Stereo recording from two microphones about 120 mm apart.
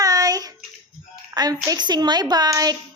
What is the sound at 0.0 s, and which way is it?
Child singing, 30° right (ahead or behind).